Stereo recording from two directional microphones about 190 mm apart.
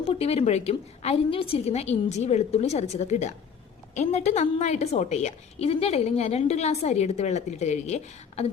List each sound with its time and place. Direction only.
0.0 s a woman's voice: 30° left (ahead or behind)